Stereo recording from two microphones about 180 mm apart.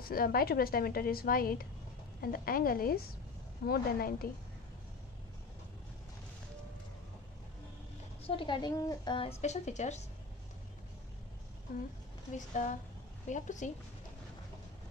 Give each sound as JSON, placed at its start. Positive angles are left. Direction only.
{"t": 0.0, "sound": "a woman's voice", "side_deg": 55}
{"t": 8.2, "sound": "a woman's voice", "side_deg": 30}
{"t": 9.4, "sound": "speech", "side_deg": 40}
{"t": 12.4, "sound": "a woman's voice", "side_deg": 45}